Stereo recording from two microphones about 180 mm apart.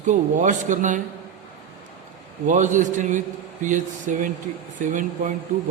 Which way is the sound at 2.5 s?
45° right (ahead or behind).